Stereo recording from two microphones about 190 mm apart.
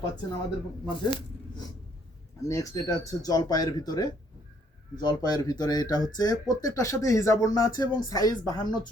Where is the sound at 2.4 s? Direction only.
15° left (ahead or behind).